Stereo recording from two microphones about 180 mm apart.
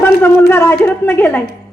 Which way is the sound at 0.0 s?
10° left (ahead or behind).